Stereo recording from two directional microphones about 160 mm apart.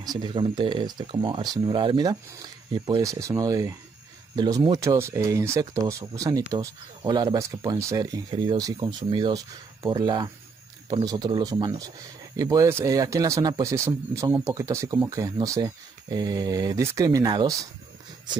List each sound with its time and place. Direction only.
0.0 s speech: 25° right (ahead or behind)